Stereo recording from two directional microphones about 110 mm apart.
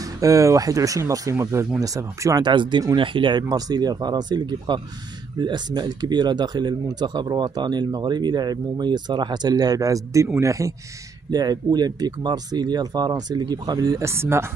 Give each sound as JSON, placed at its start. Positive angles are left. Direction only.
{"t": 0.2, "sound": "speech", "side_deg": -30}
{"t": 2.4, "sound": "speech", "side_deg": -45}